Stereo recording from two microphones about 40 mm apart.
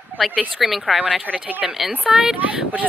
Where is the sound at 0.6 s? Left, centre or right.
Centre.